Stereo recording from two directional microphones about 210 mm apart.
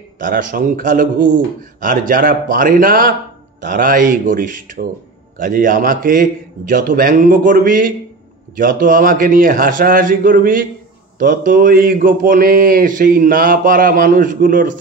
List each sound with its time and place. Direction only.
0.2 s a man's voice: 40° right (ahead or behind)